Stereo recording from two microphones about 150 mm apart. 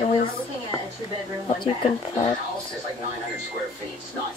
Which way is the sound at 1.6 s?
35° left (ahead or behind).